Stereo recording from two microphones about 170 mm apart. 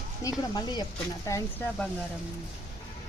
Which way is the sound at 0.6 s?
25° left (ahead or behind).